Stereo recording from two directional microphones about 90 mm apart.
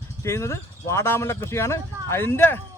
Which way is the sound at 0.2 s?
30° left (ahead or behind).